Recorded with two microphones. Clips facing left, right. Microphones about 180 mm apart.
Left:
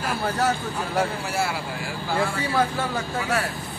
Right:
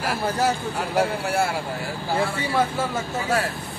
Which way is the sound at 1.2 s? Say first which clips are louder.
Right 3 dB; 55° right (ahead or behind).